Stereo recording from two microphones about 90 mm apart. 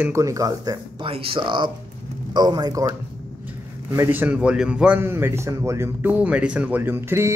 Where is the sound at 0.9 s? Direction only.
90° right; by 1.7 s 60° right (ahead or behind).